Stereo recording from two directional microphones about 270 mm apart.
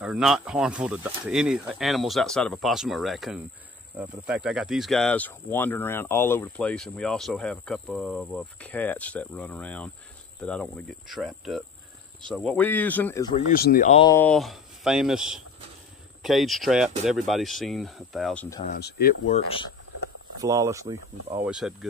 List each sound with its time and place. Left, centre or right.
0.0 s speech: centre
13.5 s speech: left
14.0 s speech: centre
18.7 s speech: left
20.3 s speech: centre